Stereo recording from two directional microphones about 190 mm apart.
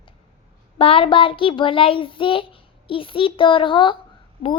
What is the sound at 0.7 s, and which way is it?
Child singing, 30° left (ahead or behind).